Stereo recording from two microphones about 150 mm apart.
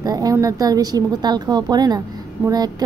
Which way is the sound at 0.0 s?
25° right (ahead or behind).